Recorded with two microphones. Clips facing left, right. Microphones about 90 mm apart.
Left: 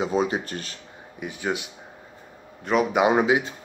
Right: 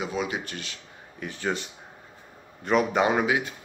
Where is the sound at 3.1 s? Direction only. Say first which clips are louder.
Left 4 dB; 20° left (ahead or behind).